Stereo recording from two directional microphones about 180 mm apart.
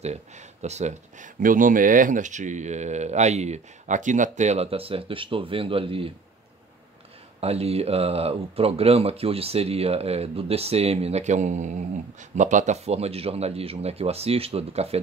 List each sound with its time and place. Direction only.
0.0 s speech: 40° right (ahead or behind)
7.3 s speech: 35° right (ahead or behind)